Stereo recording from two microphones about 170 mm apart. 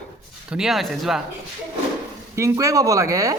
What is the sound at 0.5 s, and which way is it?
Speech, centre (ahead or behind).